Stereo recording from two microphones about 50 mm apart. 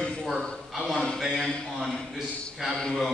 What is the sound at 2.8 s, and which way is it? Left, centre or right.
Speech, centre.